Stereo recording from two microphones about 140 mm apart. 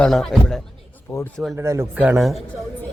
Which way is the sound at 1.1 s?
20° left (ahead or behind).